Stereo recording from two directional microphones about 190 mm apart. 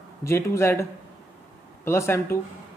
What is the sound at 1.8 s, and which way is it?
Speech, 15° left (ahead or behind).